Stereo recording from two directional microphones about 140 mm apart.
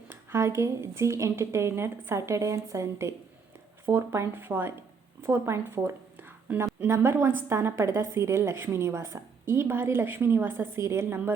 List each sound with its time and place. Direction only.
0.1 s a woman's voice: 20° right (ahead or behind)